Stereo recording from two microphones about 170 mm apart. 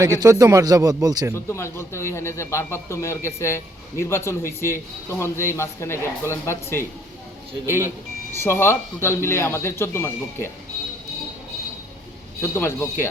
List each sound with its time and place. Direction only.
0.2 s speech: 20° right (ahead or behind)
1.3 s a man's voice: 15° left (ahead or behind)
8.4 s a man's voice: 15° left (ahead or behind)
12.4 s a man's voice: 15° left (ahead or behind)